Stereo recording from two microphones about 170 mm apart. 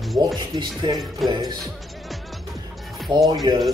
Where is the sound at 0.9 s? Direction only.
Centre (ahead or behind).